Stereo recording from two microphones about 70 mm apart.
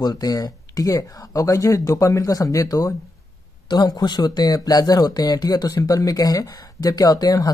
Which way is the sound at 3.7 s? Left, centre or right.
Left.